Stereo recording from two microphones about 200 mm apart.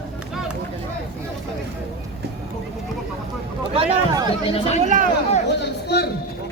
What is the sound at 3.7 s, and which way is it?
Speech, 30° right (ahead or behind).